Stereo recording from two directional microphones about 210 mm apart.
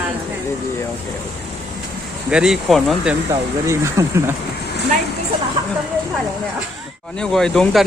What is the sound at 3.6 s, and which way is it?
Speech, 15° right (ahead or behind).